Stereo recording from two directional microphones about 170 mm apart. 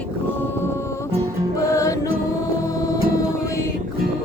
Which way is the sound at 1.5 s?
20° left (ahead or behind).